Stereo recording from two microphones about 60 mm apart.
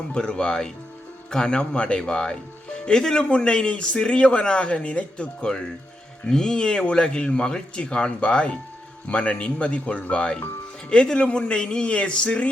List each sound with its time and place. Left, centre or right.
0.1 s speech: centre